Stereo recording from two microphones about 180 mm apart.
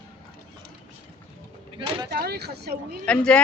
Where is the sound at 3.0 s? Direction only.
5° left (ahead or behind).